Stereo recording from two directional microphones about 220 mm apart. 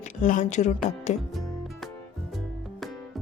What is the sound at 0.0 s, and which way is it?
Speech, 35° left (ahead or behind).